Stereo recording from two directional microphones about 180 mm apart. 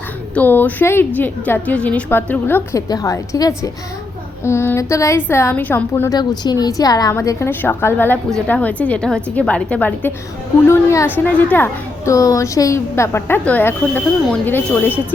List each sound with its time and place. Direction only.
0.3 s a woman's voice: 10° left (ahead or behind)